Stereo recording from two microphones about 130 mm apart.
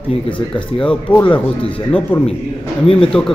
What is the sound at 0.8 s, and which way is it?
Speech, 5° left (ahead or behind).